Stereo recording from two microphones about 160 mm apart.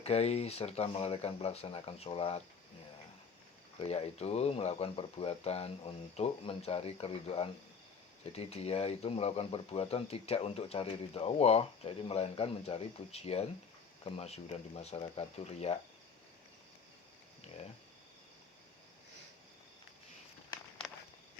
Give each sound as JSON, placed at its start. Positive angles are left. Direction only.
{"t": 0.0, "sound": "speech", "side_deg": 40}
{"t": 3.8, "sound": "speech", "side_deg": 40}